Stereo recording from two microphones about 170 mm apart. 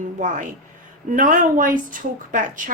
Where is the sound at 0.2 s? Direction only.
50° right (ahead or behind).